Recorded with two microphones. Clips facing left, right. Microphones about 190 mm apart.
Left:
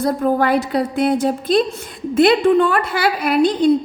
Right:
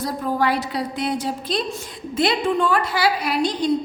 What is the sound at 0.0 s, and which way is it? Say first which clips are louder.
A woman's voice: left 6 dB; 55° left (ahead or behind).